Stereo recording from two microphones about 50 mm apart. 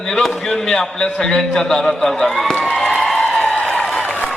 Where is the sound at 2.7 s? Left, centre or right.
Centre.